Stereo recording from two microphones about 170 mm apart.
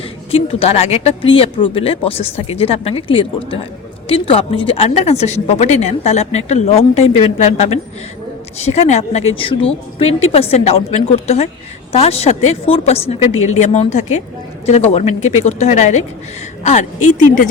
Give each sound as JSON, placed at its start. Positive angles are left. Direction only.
{"t": 0.3, "sound": "a woman's voice", "side_deg": 35}